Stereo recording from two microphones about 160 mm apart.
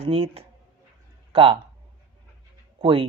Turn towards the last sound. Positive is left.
turn(degrees=-30)  # may be behind; listen again after turning